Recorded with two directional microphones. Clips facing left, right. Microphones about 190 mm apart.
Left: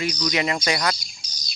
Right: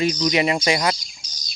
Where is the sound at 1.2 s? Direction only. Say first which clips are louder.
Even; 45° right (ahead or behind).